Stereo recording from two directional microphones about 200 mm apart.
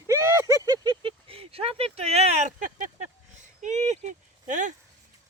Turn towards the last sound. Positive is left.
turn(degrees=-40)  # may be behind; listen again after turning